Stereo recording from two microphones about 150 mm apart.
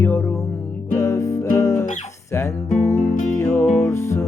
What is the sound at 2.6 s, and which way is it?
Music, 50° left (ahead or behind).